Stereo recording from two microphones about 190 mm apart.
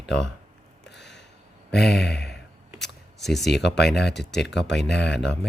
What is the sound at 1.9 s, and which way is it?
Speech, 60° left (ahead or behind).